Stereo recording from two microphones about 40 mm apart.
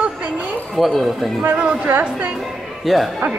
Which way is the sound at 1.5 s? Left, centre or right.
Right.